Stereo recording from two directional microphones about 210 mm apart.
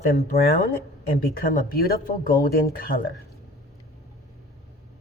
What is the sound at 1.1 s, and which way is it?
Speech, 45° left (ahead or behind).